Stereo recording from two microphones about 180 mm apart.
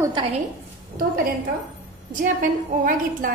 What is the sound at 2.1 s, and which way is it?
A woman's voice, 50° right (ahead or behind).